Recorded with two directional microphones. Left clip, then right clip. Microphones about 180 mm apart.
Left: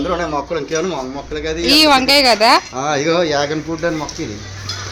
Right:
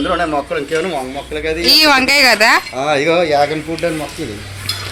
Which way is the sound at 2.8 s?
55° left (ahead or behind).